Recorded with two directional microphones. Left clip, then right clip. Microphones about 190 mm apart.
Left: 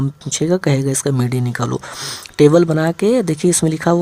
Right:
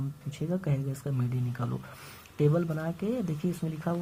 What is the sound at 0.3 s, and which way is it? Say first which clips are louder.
Speech: left 18 dB; 30° left (ahead or behind).